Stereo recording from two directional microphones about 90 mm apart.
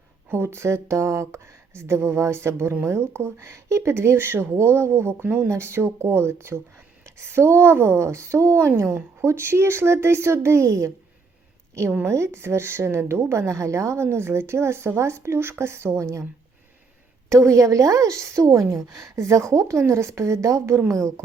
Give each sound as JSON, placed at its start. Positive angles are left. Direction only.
{"t": 0.3, "sound": "a woman's voice", "side_deg": -30}
{"t": 17.2, "sound": "a woman's voice", "side_deg": -35}